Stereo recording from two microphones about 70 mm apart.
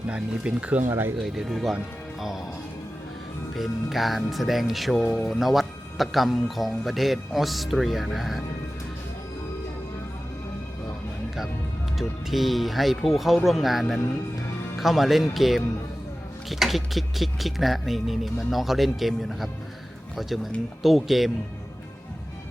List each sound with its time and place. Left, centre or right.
0.1 s speech: centre
1.2 s speech: centre
3.5 s speech: centre
11.9 s speech: centre